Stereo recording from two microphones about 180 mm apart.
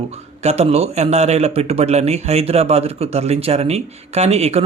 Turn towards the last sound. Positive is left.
turn(degrees=-35)  # may be behind; listen again after turning